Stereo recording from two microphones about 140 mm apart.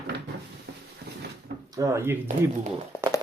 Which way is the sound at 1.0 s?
90° right.